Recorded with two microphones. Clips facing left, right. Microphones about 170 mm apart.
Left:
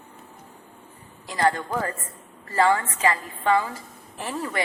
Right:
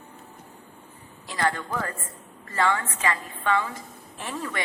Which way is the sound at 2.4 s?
35° left (ahead or behind).